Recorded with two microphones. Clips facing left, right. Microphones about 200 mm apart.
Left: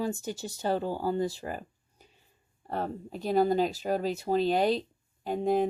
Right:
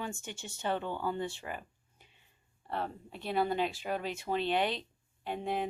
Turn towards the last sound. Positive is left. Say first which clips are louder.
# left 8 dB
turn(degrees=40)  # may be behind; listen again after turning